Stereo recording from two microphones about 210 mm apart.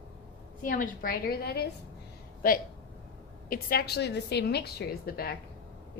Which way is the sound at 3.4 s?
45° left (ahead or behind).